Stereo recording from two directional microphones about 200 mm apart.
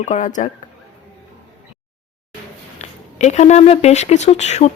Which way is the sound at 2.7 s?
35° left (ahead or behind).